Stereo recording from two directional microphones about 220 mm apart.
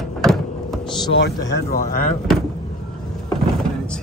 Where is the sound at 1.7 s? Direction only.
40° left (ahead or behind).